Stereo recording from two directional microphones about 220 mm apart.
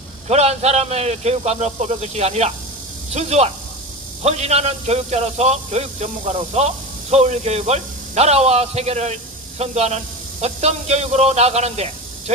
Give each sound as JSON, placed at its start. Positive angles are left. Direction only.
{"t": 0.3, "sound": "a man's voice", "side_deg": -30}